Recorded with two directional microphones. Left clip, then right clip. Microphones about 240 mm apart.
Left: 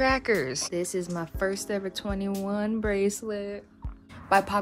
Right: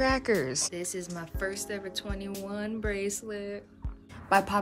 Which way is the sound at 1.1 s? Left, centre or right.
Centre.